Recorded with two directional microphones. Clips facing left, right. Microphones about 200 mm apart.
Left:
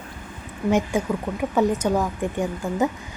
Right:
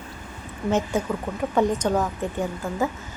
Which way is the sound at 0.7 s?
10° left (ahead or behind).